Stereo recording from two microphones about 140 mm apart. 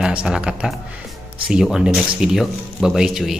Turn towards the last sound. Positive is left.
turn(degrees=-5)  # may be behind; listen again after turning